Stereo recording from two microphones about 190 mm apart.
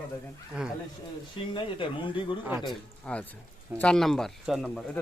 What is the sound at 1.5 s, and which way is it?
Speech, 25° left (ahead or behind).